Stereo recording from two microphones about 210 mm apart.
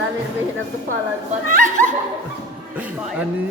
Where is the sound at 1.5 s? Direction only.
40° right (ahead or behind).